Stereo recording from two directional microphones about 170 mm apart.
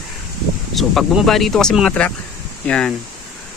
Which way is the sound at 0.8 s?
Centre (ahead or behind).